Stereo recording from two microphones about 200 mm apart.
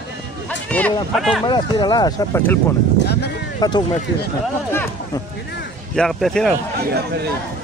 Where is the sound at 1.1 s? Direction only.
Centre (ahead or behind).